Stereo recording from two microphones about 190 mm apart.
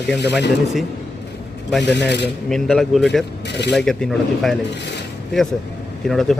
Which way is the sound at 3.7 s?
5° left (ahead or behind).